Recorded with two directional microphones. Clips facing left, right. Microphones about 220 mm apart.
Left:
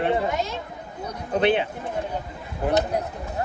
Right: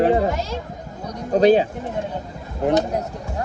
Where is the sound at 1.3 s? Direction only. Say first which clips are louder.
Right 7 dB; 40° right (ahead or behind).